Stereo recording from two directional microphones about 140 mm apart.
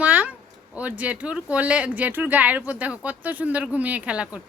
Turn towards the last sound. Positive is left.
turn(degrees=-10)  # may be behind; listen again after turning